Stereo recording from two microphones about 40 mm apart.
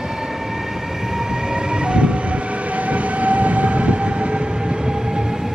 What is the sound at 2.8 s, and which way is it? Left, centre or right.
Train, right.